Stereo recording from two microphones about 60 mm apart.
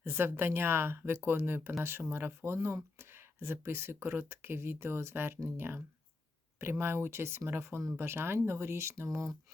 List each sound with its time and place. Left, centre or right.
0.0 s speech: right
9.0 s speech: right